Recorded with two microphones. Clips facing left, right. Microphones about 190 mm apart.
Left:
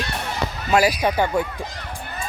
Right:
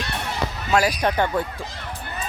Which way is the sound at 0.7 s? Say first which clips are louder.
Left 2 dB; 10° left (ahead or behind).